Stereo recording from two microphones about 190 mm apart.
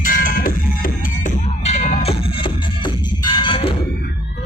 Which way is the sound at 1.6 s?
35° left (ahead or behind).